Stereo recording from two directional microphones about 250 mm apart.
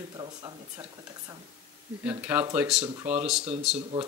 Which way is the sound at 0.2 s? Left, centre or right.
Centre.